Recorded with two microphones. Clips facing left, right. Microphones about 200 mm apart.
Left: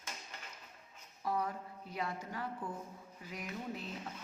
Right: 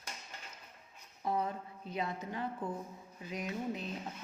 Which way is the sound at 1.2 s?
25° right (ahead or behind).